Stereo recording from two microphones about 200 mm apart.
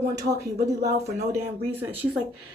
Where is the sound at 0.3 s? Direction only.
15° right (ahead or behind).